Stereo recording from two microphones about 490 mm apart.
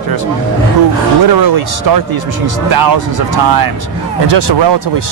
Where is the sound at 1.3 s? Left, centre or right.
Right.